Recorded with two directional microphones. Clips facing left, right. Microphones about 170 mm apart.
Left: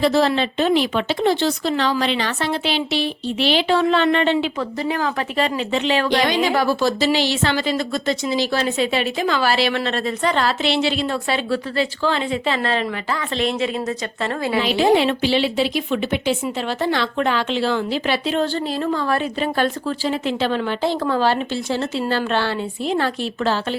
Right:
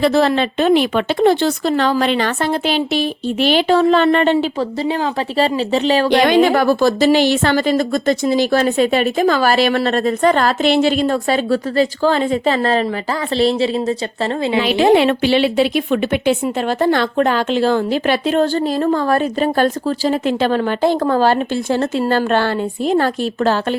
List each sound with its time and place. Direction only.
0.0 s a woman's voice: 55° right (ahead or behind)
4.8 s a woman's voice: 30° right (ahead or behind)
6.1 s a woman's voice: 55° right (ahead or behind); by 14.6 s 30° right (ahead or behind)
14.6 s a woman's voice: 65° right (ahead or behind); by 23.7 s 45° right (ahead or behind)